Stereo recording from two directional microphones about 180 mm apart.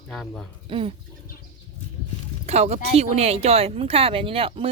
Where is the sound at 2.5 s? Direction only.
35° right (ahead or behind).